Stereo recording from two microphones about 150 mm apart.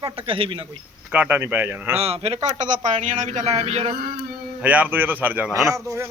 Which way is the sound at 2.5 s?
55° right (ahead or behind).